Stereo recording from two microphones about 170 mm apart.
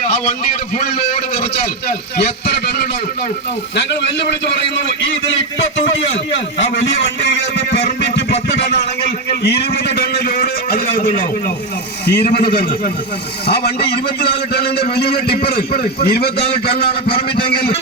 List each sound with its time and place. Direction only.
3.8 s a man's voice: 90° left
6.7 s a man's voice: 90° left
10.1 s a man's voice: 60° left (ahead or behind)
12.0 s a man's voice: 70° left (ahead or behind)
15.3 s a man's voice: 35° left (ahead or behind)
16.0 s a man's voice: 70° left (ahead or behind)
16.7 s a man's voice: 35° left (ahead or behind)